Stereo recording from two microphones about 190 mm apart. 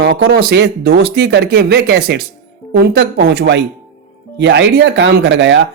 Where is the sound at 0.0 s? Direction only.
55° right (ahead or behind).